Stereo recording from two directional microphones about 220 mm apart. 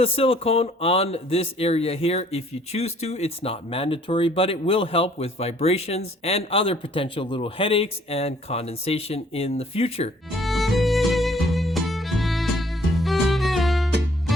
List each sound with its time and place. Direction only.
0.0 s speech: 25° left (ahead or behind)
10.3 s music: centre (ahead or behind)